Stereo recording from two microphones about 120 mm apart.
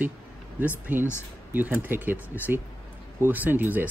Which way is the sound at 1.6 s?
15° right (ahead or behind).